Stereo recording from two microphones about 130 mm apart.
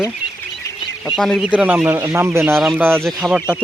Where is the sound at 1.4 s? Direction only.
10° right (ahead or behind).